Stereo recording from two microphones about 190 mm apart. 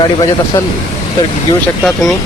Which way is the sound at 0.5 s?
15° left (ahead or behind).